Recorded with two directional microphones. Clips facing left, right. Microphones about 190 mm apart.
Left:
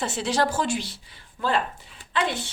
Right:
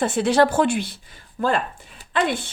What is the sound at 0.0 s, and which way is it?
Speech, 55° right (ahead or behind).